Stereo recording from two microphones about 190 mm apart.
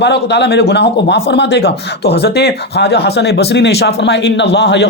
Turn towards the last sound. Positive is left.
turn(degrees=60)  # may be behind; listen again after turning